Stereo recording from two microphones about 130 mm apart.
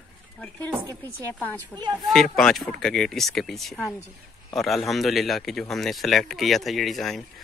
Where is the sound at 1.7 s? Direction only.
10° left (ahead or behind).